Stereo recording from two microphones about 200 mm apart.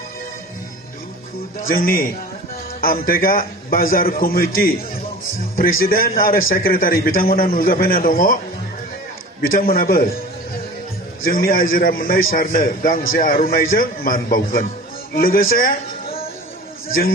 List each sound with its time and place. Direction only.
1.5 s a man's voice: 45° left (ahead or behind)
9.5 s a man's voice: 45° left (ahead or behind)
11.2 s a man's voice: 45° left (ahead or behind)